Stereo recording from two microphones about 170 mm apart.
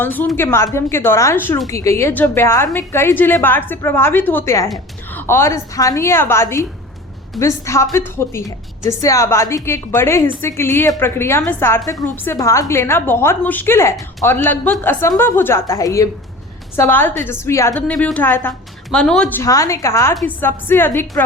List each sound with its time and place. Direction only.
0.0 s a woman's voice: 10° left (ahead or behind)
19.4 s a woman's voice: 20° left (ahead or behind)